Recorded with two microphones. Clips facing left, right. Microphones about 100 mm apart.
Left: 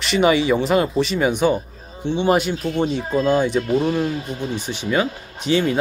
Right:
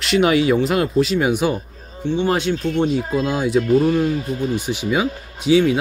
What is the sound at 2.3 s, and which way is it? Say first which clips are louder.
Speech: even; 5° left (ahead or behind).